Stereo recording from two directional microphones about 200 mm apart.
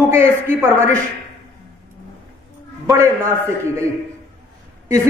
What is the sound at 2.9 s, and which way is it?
A man's voice, 15° right (ahead or behind).